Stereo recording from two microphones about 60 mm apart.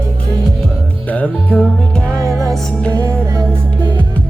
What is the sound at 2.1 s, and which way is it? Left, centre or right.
Music, right.